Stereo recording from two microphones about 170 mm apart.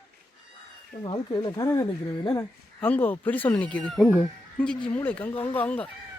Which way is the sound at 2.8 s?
10° left (ahead or behind).